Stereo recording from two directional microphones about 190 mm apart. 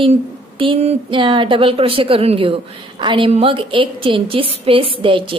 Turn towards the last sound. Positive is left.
turn(degrees=-25)  # may be behind; listen again after turning